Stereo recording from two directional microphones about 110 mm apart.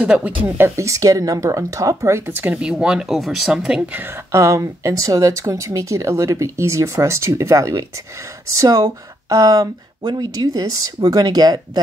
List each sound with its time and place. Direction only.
0.0 s speech: 15° right (ahead or behind)
0.7 s speech: 25° right (ahead or behind); by 4.0 s 5° right (ahead or behind)
4.0 s speech: 25° right (ahead or behind)